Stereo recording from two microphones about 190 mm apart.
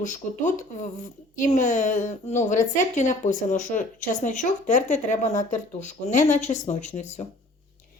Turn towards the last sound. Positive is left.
turn(degrees=35)  # may be behind; listen again after turning